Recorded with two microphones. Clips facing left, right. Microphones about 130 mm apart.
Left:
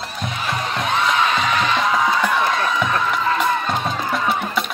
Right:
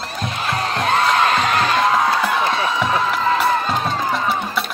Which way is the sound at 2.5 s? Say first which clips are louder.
Right 1 dB; centre (ahead or behind).